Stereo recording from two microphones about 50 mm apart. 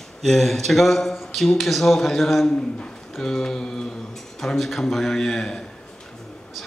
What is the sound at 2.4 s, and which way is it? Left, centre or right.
A man's voice, centre.